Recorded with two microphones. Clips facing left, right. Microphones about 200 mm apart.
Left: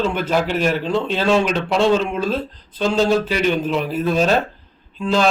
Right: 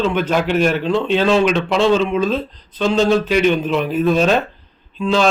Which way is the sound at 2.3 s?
10° left (ahead or behind).